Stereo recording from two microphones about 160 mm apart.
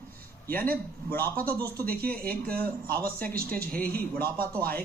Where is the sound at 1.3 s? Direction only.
65° right (ahead or behind).